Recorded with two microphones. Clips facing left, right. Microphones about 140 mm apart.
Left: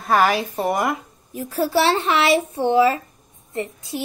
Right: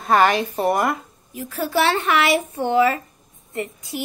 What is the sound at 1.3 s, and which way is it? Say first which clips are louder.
Speech: left 3 dB; 35° left (ahead or behind).